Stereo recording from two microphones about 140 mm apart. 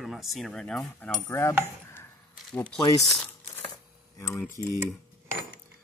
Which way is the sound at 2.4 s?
5° left (ahead or behind).